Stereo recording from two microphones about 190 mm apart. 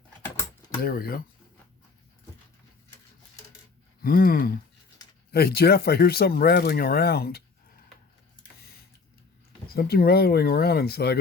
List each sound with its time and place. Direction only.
0.8 s gasp: 50° left (ahead or behind)
4.0 s gasp: 50° left (ahead or behind)
5.3 s speech: 55° left (ahead or behind)
9.6 s speech: 55° left (ahead or behind)